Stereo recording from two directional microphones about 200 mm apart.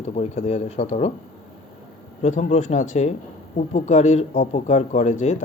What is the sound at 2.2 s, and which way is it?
Speech, 35° left (ahead or behind).